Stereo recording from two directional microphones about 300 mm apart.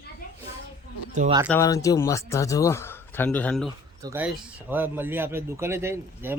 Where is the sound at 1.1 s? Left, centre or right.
Right.